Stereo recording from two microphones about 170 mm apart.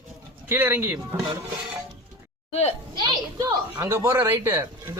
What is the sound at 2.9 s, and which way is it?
Speech, 25° right (ahead or behind).